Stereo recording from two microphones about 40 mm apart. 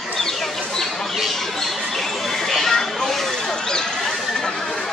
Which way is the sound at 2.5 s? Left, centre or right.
Centre.